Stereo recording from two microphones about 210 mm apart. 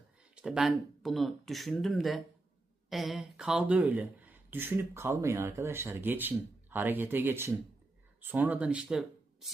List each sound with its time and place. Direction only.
0.2 s speech: 5° right (ahead or behind)